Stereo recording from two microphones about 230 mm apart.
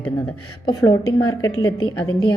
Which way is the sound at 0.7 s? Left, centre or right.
Centre.